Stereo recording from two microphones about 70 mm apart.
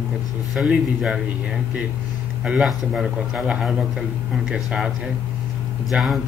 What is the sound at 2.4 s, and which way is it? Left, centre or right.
Speech, centre.